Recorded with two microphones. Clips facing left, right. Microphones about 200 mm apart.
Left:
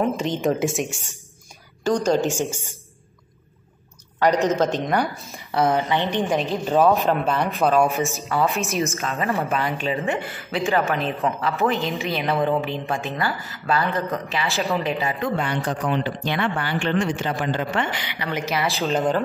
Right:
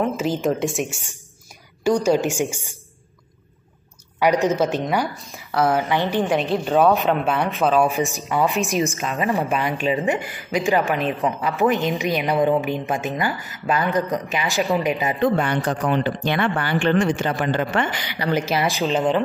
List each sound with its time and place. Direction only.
0.0 s a woman's voice: 5° right (ahead or behind)
2.0 s a woman's voice: 15° right (ahead or behind)
4.5 s a woman's voice: 10° right (ahead or behind)
8.3 s a woman's voice: 15° right (ahead or behind)
15.2 s speech: 50° right (ahead or behind)
18.9 s a woman's voice: centre (ahead or behind)